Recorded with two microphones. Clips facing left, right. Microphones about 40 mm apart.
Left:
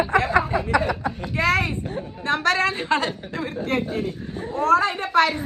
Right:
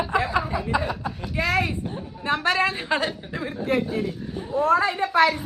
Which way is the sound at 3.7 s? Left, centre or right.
Left.